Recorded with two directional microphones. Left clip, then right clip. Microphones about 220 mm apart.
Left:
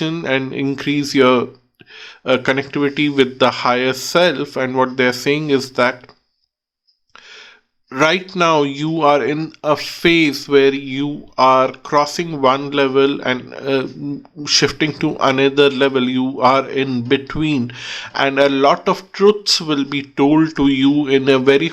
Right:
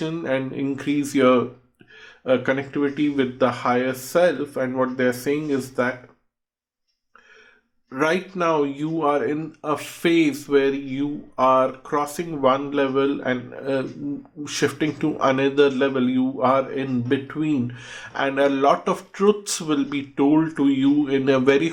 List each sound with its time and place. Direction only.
0.0 s speech: 25° left (ahead or behind)
7.9 s speech: 35° left (ahead or behind)
9.2 s speech: 25° left (ahead or behind)